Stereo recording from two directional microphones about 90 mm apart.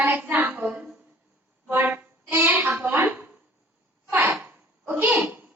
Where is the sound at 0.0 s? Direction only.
20° right (ahead or behind).